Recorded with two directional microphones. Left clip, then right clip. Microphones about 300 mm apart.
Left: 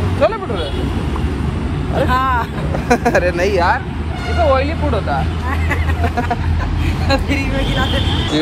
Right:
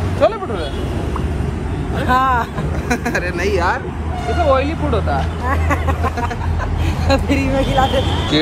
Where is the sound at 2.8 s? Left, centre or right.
Centre.